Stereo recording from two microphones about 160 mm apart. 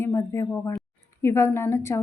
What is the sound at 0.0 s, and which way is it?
Speech, 15° left (ahead or behind).